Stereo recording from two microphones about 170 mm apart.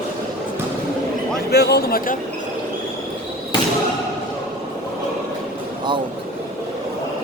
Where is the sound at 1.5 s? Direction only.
70° left (ahead or behind).